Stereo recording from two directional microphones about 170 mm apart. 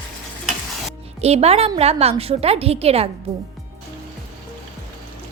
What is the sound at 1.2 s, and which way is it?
A woman's voice, 40° right (ahead or behind).